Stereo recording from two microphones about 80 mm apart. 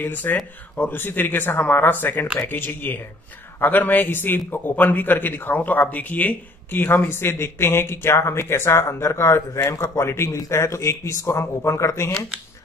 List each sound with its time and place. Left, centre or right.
0.0 s a man's voice: left